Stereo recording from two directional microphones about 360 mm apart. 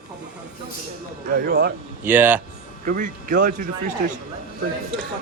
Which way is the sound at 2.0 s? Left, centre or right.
Centre.